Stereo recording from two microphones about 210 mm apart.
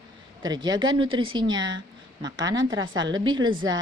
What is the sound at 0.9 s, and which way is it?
Speech, 80° right.